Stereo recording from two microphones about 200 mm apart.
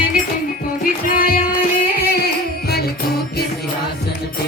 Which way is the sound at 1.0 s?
45° left (ahead or behind).